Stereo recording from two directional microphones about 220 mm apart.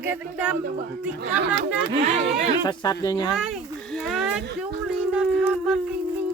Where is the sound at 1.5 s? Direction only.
30° right (ahead or behind).